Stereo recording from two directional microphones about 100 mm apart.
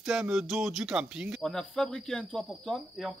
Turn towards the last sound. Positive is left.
turn(degrees=0)  # may be behind; listen again after turning